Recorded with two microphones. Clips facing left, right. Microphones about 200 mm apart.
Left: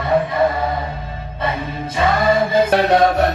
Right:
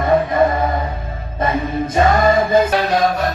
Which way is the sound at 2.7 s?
65° left (ahead or behind).